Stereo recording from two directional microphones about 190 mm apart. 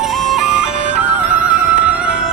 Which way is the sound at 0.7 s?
40° right (ahead or behind).